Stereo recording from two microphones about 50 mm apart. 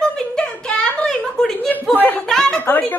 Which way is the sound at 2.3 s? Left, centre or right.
Centre.